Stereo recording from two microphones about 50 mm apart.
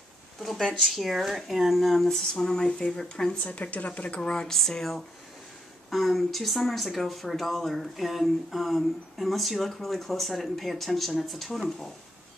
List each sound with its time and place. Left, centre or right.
0.4 s speech: centre
3.4 s speech: left
4.2 s speech: centre